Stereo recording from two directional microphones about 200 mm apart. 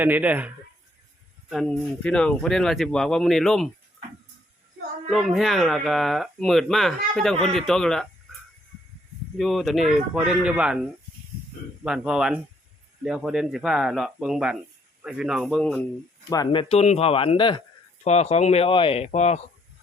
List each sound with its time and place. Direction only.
0.0 s speech: 10° right (ahead or behind)
5.1 s speech: centre (ahead or behind)
9.4 s speech: centre (ahead or behind)
11.8 s speech: 5° right (ahead or behind)
16.3 s speech: 20° left (ahead or behind)